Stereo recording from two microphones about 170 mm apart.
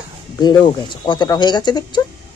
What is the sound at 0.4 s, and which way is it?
A woman's voice, 25° left (ahead or behind).